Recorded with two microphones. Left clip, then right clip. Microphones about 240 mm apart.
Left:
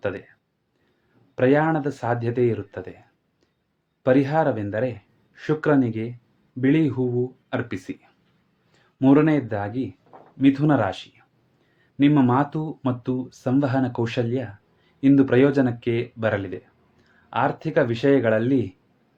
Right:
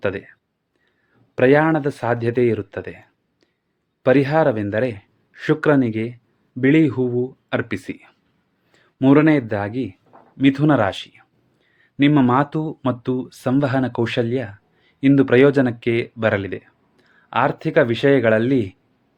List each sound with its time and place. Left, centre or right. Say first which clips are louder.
0.0 s speech: right 5 dB; right
1.4 s speech: right 5 dB; right